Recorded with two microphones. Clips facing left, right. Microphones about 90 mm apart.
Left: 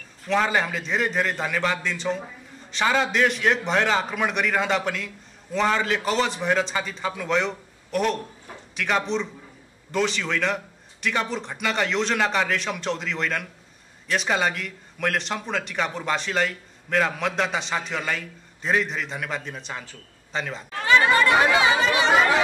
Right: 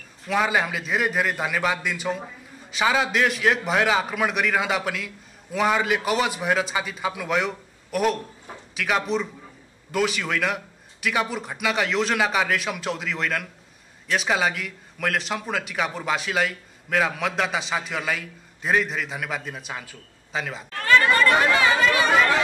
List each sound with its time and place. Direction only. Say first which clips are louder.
0.3 s a man's voice: even; 5° right (ahead or behind)
20.7 s chatter: even; 15° left (ahead or behind)
22.1 s speech: left 3 dB; 5° left (ahead or behind)